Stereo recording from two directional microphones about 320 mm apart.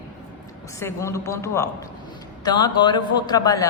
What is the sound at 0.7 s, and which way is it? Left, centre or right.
A woman's voice, centre.